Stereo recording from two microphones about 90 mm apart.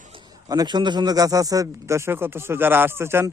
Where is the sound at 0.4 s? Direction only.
45° right (ahead or behind).